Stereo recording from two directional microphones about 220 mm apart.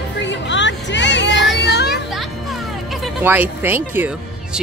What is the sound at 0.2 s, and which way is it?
Chatter, 55° left (ahead or behind).